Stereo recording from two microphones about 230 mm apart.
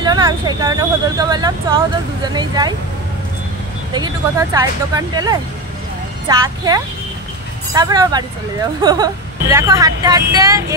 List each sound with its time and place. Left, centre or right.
0.0 s speech: centre
3.9 s speech: centre